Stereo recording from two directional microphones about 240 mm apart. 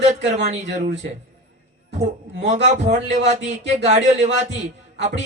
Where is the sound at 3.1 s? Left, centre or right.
Right.